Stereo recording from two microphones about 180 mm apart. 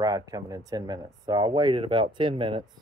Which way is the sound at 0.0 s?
20° right (ahead or behind).